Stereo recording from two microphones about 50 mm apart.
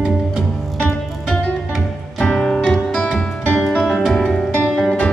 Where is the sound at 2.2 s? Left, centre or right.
Centre.